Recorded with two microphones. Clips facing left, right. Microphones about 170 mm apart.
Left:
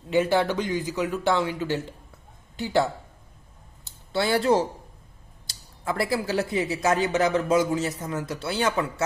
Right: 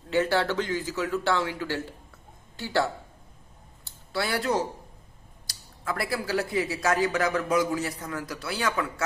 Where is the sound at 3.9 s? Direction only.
25° left (ahead or behind).